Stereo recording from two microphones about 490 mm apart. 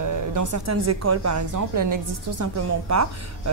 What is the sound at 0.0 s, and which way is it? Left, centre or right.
A woman's voice, right.